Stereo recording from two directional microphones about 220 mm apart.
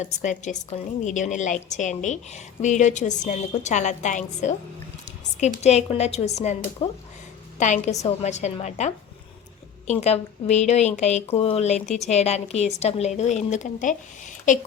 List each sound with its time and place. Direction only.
0.0 s a woman's voice: 35° left (ahead or behind)